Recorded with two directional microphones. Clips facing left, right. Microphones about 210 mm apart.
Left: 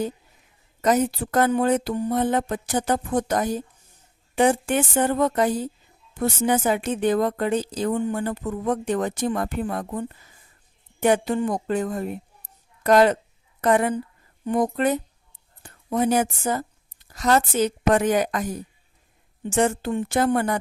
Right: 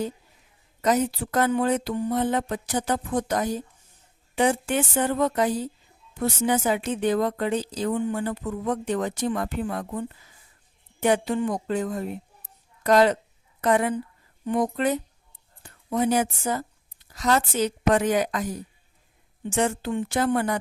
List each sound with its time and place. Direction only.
0.8 s a woman's voice: 50° left (ahead or behind)
19.5 s a woman's voice: 45° left (ahead or behind)